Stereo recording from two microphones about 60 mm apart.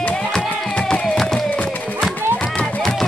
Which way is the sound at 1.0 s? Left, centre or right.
Centre.